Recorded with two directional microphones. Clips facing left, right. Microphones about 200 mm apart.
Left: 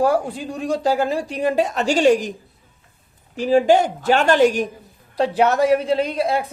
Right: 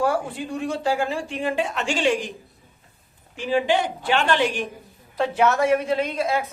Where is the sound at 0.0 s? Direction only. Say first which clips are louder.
Left 4 dB; 40° left (ahead or behind).